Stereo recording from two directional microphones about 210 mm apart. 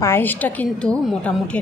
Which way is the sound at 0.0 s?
10° left (ahead or behind).